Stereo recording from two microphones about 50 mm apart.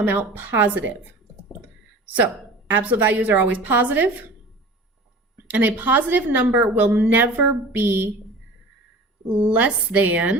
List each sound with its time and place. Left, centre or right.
0.0 s a woman's voice: right
2.0 s a woman's voice: right
5.5 s a woman's voice: right
9.3 s a woman's voice: right